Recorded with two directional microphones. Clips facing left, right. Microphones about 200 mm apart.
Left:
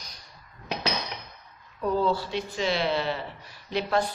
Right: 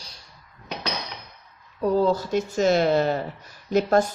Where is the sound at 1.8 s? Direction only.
40° right (ahead or behind).